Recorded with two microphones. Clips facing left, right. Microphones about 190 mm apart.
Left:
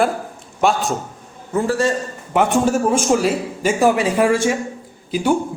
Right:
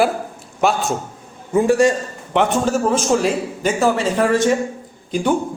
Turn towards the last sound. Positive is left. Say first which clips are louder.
# left 1 dB
turn(degrees=5)  # may be behind; listen again after turning